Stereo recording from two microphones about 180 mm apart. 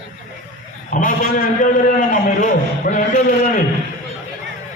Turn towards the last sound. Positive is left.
turn(degrees=45)  # may be behind; listen again after turning